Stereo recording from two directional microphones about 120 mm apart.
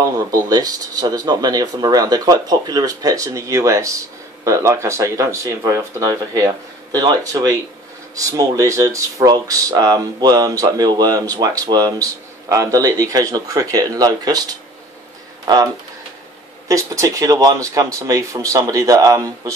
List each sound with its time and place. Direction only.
0.0 s speech: 30° right (ahead or behind)